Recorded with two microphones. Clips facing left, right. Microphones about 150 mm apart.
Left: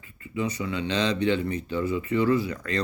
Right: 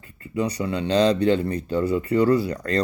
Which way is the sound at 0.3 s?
40° right (ahead or behind).